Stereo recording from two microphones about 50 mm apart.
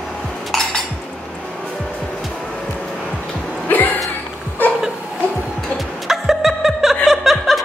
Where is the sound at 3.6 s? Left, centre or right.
Left.